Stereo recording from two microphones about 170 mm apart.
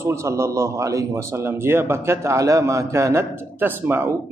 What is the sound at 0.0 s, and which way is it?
A man's voice, 15° right (ahead or behind).